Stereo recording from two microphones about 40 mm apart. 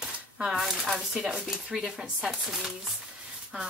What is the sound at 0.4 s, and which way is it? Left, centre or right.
Speech, centre.